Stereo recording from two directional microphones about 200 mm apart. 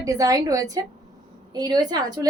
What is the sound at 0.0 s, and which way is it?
A woman's voice, 15° right (ahead or behind).